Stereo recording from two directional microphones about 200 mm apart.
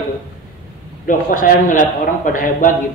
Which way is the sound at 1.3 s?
45° left (ahead or behind).